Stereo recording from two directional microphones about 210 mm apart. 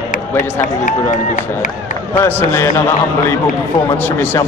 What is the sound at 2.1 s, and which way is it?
Speech, 10° left (ahead or behind).